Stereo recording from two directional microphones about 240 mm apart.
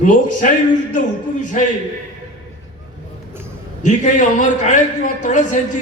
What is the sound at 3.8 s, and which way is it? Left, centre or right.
A man's voice, left.